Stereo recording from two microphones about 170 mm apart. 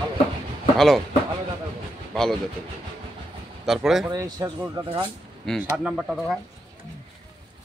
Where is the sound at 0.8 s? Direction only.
Centre (ahead or behind).